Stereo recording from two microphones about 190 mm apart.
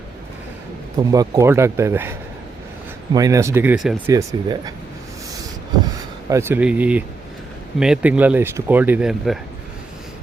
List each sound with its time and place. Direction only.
0.9 s speech: 20° right (ahead or behind)
4.1 s speech: 15° right (ahead or behind)
6.2 s speech: 15° right (ahead or behind)